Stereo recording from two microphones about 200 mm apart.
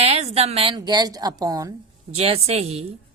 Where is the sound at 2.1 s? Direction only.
30° right (ahead or behind).